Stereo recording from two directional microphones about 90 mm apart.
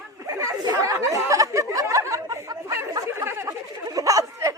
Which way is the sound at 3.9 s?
40° right (ahead or behind).